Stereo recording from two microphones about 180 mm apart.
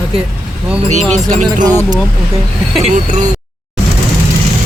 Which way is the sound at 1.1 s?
40° right (ahead or behind).